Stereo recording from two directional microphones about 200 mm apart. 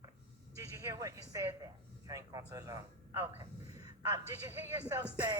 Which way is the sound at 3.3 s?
20° right (ahead or behind).